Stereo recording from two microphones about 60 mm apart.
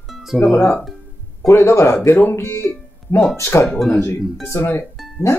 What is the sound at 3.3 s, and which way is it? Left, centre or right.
Speech, left.